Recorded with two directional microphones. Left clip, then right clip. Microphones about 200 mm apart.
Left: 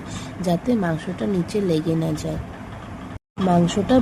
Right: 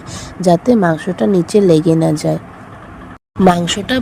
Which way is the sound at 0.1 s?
35° right (ahead or behind).